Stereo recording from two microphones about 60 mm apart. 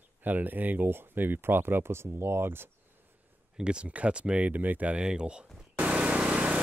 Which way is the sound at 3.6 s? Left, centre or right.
Centre.